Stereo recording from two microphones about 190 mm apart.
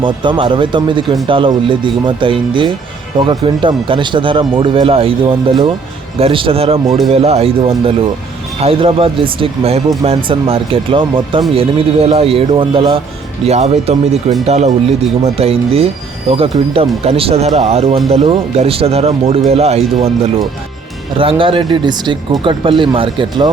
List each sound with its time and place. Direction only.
0.0 s speech: 25° right (ahead or behind)
21.2 s speech: 25° right (ahead or behind)